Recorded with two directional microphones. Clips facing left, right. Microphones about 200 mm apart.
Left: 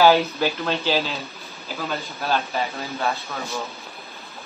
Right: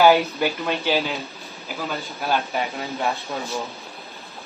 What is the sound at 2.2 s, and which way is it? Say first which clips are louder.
Speech: right 1 dB; 15° right (ahead or behind).